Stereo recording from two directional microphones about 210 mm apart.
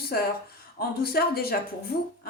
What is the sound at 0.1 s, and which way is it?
A woman's voice, 50° left (ahead or behind).